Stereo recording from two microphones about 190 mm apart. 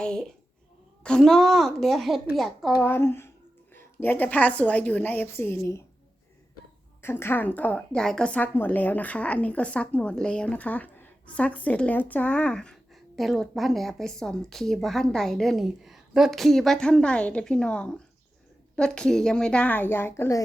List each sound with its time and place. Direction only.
0.0 s a child's voice: 5° left (ahead or behind)
2.7 s a woman's voice: 10° left (ahead or behind)
7.0 s a woman's voice: 10° left (ahead or behind)